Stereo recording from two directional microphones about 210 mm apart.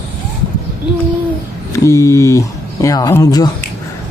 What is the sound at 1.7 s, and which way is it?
Speech, 15° left (ahead or behind).